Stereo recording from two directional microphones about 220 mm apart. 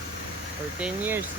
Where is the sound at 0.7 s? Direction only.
5° right (ahead or behind).